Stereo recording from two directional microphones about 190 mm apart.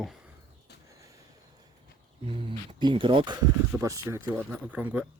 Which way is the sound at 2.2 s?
25° right (ahead or behind).